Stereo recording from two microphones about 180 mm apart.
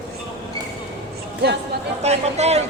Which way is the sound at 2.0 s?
35° right (ahead or behind).